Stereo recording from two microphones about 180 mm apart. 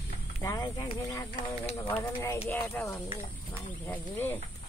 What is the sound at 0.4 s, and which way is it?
Speech, 20° left (ahead or behind).